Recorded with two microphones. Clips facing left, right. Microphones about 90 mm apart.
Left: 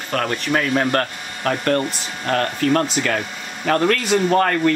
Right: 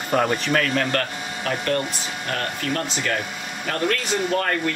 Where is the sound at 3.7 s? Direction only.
65° left (ahead or behind).